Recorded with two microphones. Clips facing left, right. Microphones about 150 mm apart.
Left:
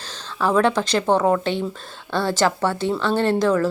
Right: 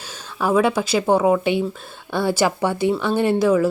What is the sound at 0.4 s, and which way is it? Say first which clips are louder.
A woman's voice: even; 10° right (ahead or behind).